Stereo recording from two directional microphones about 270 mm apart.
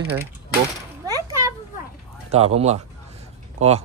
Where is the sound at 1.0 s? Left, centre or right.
Centre.